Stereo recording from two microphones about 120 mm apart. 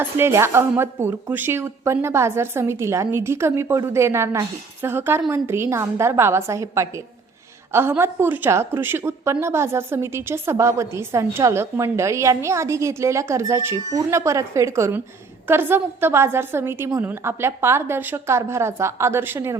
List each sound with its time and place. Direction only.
0.0 s a woman's voice: 20° right (ahead or behind)